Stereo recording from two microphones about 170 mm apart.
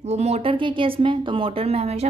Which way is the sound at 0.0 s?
40° right (ahead or behind).